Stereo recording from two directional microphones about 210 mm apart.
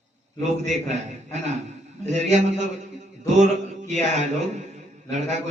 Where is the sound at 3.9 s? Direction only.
35° right (ahead or behind).